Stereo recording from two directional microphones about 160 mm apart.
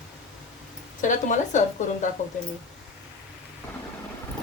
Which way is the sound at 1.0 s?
50° left (ahead or behind).